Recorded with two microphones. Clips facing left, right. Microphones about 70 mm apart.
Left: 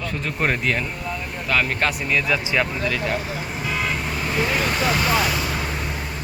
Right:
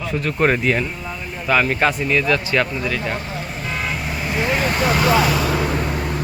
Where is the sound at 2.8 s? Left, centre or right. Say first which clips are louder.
Even; centre.